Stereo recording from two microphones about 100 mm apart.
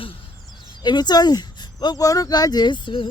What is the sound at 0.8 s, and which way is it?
Speech, 45° left (ahead or behind).